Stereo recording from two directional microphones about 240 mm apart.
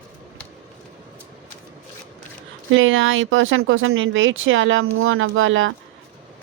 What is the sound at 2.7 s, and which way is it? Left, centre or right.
Speech, right.